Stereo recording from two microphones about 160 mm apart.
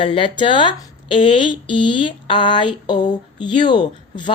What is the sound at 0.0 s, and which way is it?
Speech, 30° left (ahead or behind).